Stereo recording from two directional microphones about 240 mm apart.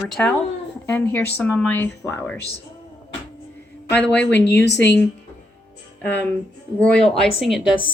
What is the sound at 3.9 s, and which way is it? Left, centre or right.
Speech, centre.